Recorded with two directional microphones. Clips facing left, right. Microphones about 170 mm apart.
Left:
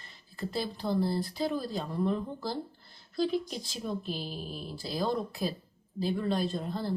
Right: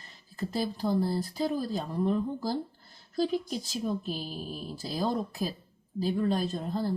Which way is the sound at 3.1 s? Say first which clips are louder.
Right 1 dB; 40° right (ahead or behind).